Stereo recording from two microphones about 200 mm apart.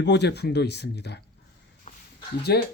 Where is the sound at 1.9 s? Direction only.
30° left (ahead or behind).